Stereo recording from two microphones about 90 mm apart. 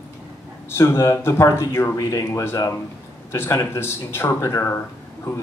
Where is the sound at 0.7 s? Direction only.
30° left (ahead or behind).